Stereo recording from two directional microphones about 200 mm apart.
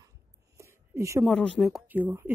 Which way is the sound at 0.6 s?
15° right (ahead or behind).